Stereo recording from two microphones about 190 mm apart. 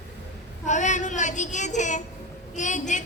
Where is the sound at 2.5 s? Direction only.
40° left (ahead or behind).